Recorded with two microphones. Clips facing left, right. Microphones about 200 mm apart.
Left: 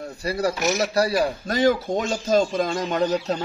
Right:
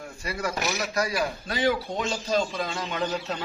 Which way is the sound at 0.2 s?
35° left (ahead or behind).